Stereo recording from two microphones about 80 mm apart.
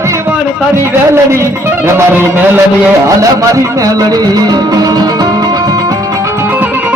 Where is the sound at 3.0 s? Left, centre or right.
Right.